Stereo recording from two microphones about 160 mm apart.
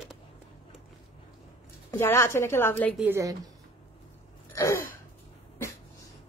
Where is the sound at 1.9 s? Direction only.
15° left (ahead or behind).